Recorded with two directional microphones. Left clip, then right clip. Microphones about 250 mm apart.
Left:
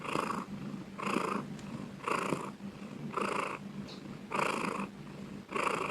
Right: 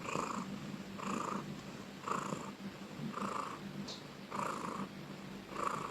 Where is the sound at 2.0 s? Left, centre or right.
Centre.